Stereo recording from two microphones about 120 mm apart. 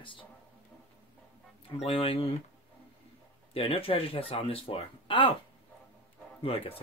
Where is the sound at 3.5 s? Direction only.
55° left (ahead or behind).